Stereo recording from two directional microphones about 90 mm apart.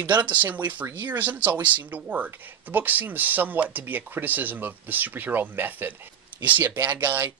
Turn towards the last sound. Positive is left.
turn(degrees=-20)  # may be behind; listen again after turning